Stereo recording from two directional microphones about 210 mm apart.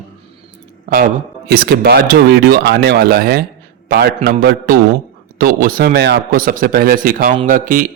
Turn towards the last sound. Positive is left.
turn(degrees=-40)  # may be behind; listen again after turning